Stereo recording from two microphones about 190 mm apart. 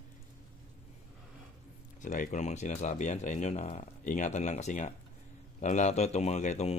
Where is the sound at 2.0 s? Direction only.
40° left (ahead or behind).